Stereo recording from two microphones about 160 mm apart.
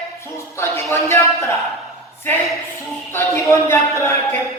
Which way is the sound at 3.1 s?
15° left (ahead or behind).